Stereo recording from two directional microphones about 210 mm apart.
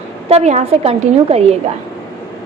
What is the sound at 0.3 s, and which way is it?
A woman's voice, 30° right (ahead or behind).